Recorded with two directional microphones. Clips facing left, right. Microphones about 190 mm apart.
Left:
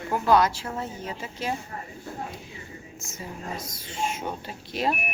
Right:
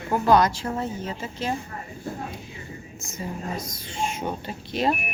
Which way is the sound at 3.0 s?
5° left (ahead or behind).